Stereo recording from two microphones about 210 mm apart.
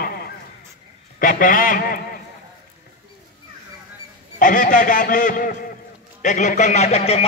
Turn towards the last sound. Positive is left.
turn(degrees=30)  # may be behind; listen again after turning